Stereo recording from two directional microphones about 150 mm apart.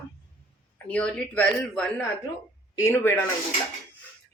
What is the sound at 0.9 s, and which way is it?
A woman's voice, 10° left (ahead or behind).